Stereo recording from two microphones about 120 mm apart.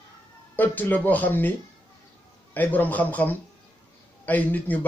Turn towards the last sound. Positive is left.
turn(degrees=15)  # may be behind; listen again after turning